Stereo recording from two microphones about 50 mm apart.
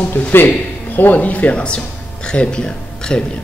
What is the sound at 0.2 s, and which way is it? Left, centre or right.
Speech, left.